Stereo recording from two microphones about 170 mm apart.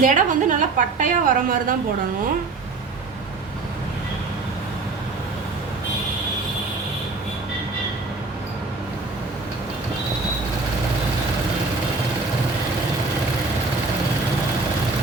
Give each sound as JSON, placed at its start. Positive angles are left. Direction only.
{"t": 0.0, "sound": "a woman's voice", "side_deg": -50}